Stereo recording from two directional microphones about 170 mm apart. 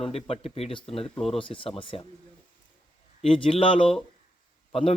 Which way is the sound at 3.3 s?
30° left (ahead or behind).